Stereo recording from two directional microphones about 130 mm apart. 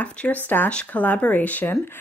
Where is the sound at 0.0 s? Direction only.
10° left (ahead or behind).